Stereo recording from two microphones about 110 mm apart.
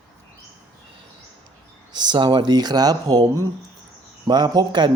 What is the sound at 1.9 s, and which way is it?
A man's voice, 40° right (ahead or behind).